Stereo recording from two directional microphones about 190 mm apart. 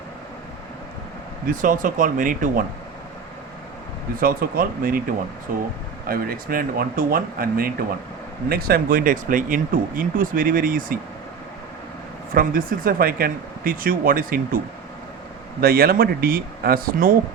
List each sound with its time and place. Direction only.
1.5 s speech: 45° right (ahead or behind)
4.2 s speech: 50° right (ahead or behind)
12.3 s speech: 50° right (ahead or behind)
15.6 s speech: 50° right (ahead or behind)